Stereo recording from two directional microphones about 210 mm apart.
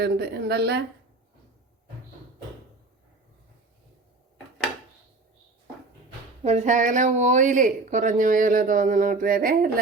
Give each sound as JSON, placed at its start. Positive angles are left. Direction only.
{"t": 0.0, "sound": "a woman's voice", "side_deg": -50}
{"t": 6.4, "sound": "speech", "side_deg": -30}